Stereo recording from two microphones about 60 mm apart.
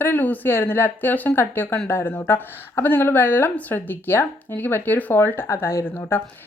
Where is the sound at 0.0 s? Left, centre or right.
Left.